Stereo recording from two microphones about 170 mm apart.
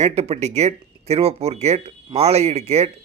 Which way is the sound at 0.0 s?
40° right (ahead or behind).